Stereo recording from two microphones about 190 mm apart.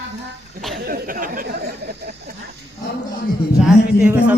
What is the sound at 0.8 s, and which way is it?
Speech, 45° right (ahead or behind).